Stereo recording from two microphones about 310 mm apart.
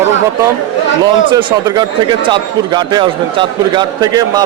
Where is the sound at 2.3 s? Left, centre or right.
Centre.